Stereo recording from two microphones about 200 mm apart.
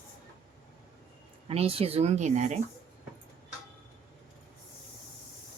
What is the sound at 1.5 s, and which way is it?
Speech, 30° right (ahead or behind).